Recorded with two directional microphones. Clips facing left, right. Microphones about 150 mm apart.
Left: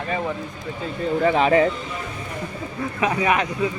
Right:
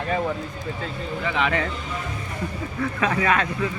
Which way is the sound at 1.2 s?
35° left (ahead or behind).